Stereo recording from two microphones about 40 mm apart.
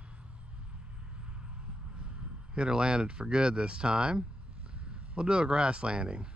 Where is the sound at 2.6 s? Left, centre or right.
Right.